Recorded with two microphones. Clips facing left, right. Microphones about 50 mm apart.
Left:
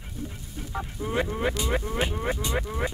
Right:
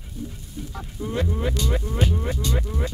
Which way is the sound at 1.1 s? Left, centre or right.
Left.